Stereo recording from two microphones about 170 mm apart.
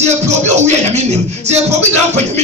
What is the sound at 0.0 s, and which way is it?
Music, 40° right (ahead or behind).